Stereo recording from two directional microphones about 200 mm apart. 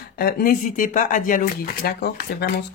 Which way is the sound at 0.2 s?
45° left (ahead or behind).